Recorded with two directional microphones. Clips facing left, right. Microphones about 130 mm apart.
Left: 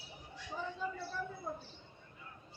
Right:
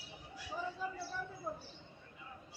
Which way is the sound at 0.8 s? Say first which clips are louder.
Left 1 dB; 5° right (ahead or behind).